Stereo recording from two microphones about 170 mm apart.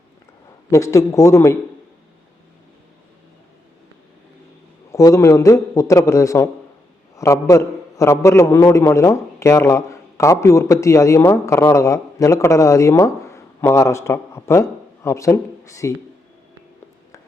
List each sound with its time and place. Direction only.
0.7 s a man's voice: 15° left (ahead or behind)
4.9 s a man's voice: 20° left (ahead or behind)